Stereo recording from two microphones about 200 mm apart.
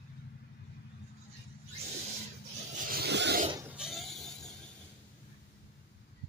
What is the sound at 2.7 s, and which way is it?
Vehicle, 45° right (ahead or behind).